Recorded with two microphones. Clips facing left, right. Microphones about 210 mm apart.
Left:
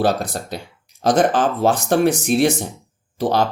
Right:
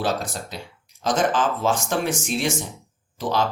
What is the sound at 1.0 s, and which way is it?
Speech, 60° left (ahead or behind).